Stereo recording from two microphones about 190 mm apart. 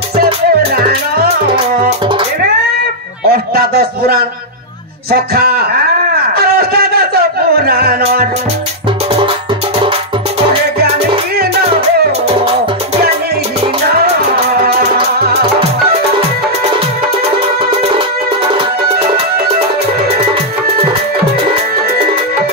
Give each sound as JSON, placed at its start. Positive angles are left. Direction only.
{"t": 0.1, "sound": "music", "side_deg": -55}
{"t": 1.5, "sound": "music", "side_deg": -25}
{"t": 3.3, "sound": "a sound", "side_deg": -55}
{"t": 5.1, "sound": "speech", "side_deg": -55}
{"t": 6.3, "sound": "music", "side_deg": -55}
{"t": 17.6, "sound": "music", "side_deg": -25}